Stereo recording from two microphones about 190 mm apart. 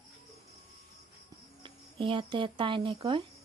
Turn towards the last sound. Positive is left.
turn(degrees=-25)  # may be behind; listen again after turning